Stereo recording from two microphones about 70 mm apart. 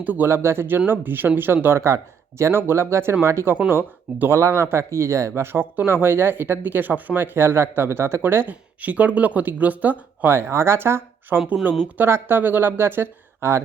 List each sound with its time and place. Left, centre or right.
0.0 s speech: right
1.6 s speech: right
10.3 s speech: right